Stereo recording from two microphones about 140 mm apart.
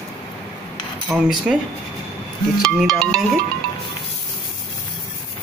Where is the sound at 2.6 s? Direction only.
5° left (ahead or behind).